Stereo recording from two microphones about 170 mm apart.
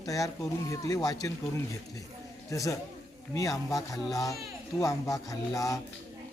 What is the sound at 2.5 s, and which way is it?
Speech, 20° left (ahead or behind).